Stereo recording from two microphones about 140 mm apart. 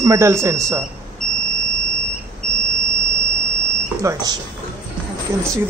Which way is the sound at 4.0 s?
25° right (ahead or behind).